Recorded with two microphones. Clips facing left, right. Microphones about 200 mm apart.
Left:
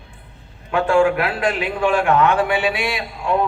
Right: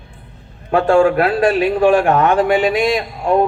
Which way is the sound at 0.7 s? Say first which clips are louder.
Right 4 dB; 40° right (ahead or behind).